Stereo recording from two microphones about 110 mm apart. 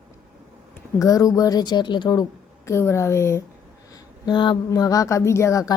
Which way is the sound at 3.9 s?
40° left (ahead or behind).